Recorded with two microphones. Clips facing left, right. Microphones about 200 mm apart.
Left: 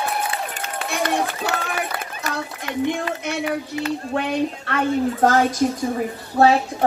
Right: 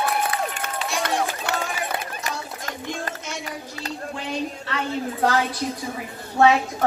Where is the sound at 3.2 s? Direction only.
60° left (ahead or behind).